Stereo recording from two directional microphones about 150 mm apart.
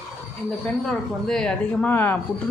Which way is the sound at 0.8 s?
5° left (ahead or behind).